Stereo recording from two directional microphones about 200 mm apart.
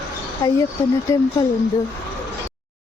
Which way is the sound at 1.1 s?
15° left (ahead or behind).